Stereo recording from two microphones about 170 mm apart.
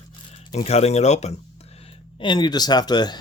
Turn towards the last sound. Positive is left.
turn(degrees=25)  # may be behind; listen again after turning